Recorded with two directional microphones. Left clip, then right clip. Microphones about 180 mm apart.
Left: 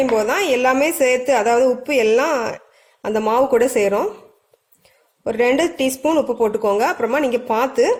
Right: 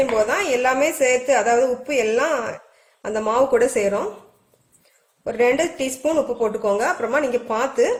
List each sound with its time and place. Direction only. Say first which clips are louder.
0.3 s a woman's voice: left 3 dB; 50° left (ahead or behind)
5.2 s a woman's voice: left 2 dB; 55° left (ahead or behind)